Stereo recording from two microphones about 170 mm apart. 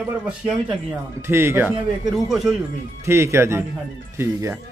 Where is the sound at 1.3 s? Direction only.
15° right (ahead or behind).